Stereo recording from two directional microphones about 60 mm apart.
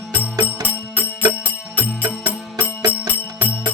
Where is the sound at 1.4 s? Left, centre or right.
Left.